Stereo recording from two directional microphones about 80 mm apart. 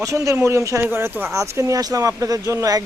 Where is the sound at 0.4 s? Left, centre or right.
Right.